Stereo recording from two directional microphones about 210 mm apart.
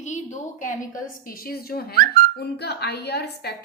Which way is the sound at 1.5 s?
45° left (ahead or behind).